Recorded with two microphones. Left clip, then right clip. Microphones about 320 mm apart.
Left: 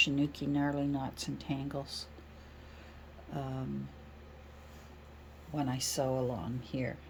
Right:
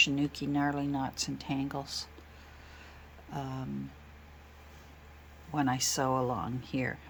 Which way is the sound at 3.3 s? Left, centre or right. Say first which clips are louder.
Right 1 dB; centre.